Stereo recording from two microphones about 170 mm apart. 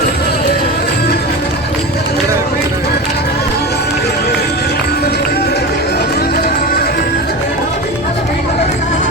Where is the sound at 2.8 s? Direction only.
70° left (ahead or behind).